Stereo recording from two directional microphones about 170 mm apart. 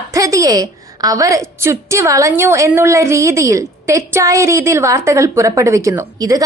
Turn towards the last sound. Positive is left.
turn(degrees=-20)  # may be behind; listen again after turning